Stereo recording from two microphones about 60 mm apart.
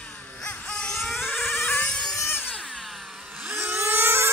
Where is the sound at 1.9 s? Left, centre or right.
Centre.